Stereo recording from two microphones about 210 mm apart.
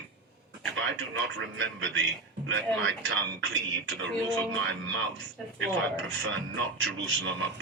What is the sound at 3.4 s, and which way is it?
Speech, 60° right (ahead or behind).